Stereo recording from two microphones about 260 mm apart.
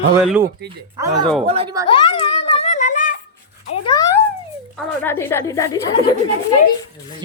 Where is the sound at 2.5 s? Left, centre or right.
Left.